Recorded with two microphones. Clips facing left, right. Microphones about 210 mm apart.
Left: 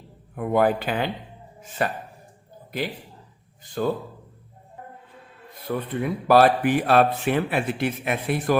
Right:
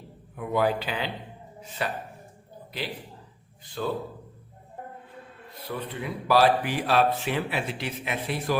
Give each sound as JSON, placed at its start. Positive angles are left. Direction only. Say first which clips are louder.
{"t": 0.3, "sound": "speech", "louder": "left 4 dB", "side_deg": 50}
{"t": 3.8, "sound": "speech", "louder": "left 6 dB", "side_deg": 50}
{"t": 5.6, "sound": "speech", "louder": "left 7 dB", "side_deg": 50}